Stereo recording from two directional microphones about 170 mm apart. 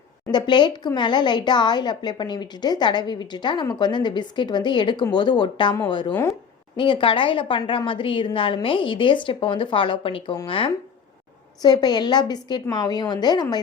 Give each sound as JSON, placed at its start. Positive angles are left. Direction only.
{"t": 0.3, "sound": "a woman's voice", "side_deg": 25}